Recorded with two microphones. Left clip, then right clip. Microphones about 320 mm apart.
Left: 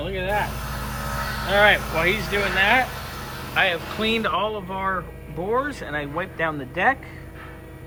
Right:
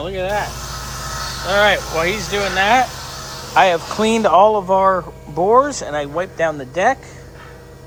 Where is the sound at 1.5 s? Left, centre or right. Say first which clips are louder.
Right 3 dB; centre.